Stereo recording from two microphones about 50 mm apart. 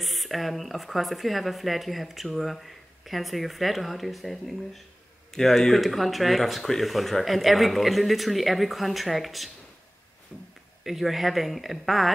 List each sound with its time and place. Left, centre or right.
0.0 s speech: centre
10.8 s speech: centre